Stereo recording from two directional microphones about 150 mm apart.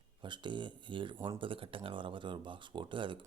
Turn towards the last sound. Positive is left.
turn(degrees=-35)  # may be behind; listen again after turning